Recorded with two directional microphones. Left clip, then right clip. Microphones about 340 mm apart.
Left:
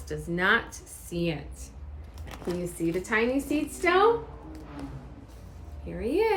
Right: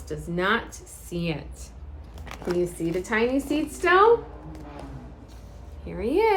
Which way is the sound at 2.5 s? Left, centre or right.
Centre.